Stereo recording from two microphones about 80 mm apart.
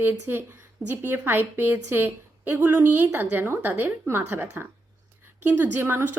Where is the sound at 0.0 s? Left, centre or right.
Right.